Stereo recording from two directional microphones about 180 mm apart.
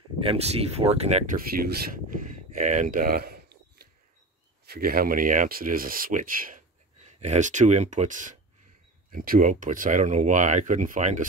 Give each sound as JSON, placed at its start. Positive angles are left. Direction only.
{"t": 0.2, "sound": "speech", "side_deg": -35}
{"t": 1.5, "sound": "speech", "side_deg": -55}
{"t": 2.5, "sound": "a sound", "side_deg": -45}
{"t": 4.6, "sound": "speech", "side_deg": -55}